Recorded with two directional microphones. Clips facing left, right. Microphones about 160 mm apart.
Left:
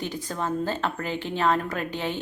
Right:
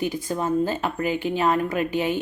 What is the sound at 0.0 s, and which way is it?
Speech, 10° right (ahead or behind).